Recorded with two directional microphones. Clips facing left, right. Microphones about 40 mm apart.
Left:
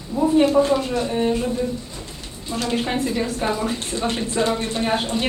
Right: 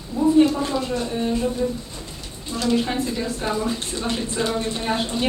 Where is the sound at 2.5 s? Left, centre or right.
Left.